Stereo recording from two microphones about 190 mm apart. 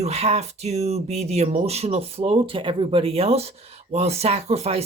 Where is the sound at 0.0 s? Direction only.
35° right (ahead or behind).